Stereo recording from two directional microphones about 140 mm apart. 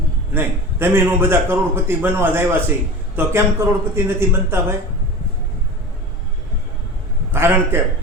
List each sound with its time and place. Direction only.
0.3 s a man's voice: 15° right (ahead or behind)
7.3 s a man's voice: 15° right (ahead or behind)